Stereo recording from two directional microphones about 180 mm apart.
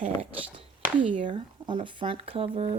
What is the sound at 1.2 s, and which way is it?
Speech, 25° right (ahead or behind).